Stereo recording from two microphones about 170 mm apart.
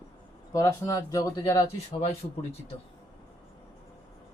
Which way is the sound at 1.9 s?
35° left (ahead or behind).